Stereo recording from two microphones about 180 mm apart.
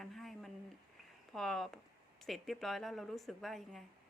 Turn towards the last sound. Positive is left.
turn(degrees=0)  # may be behind; listen again after turning